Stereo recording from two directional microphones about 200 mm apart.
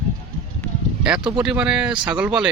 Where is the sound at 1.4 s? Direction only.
5° right (ahead or behind).